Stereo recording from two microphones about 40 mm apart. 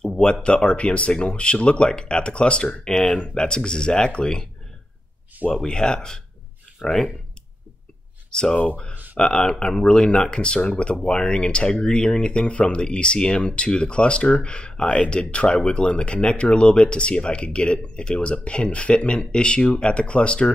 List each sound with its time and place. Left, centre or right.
0.2 s speech: left
5.5 s speech: centre
6.8 s speech: centre
8.3 s speech: centre
8.5 s speech: left
9.1 s speech: centre